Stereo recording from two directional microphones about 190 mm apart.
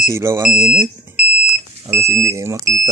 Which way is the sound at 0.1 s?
15° right (ahead or behind).